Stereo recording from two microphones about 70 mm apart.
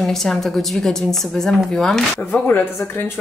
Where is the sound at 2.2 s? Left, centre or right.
Left.